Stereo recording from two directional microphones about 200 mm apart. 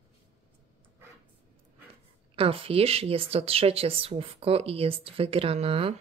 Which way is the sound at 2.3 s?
25° right (ahead or behind).